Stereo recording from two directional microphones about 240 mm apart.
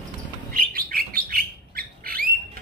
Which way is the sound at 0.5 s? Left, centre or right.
Right.